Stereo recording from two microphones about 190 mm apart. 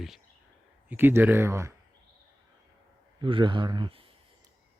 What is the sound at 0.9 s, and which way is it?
Speech, 10° right (ahead or behind).